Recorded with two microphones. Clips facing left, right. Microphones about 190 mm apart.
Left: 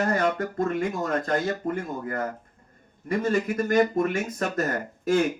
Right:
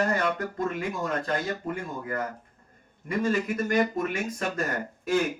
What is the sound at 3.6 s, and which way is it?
Speech, 45° left (ahead or behind).